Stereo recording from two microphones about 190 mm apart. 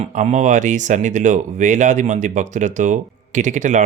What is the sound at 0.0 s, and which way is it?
Speech, 40° right (ahead or behind).